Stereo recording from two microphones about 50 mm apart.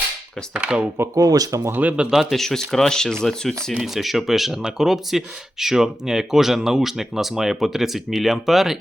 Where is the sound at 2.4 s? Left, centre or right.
Centre.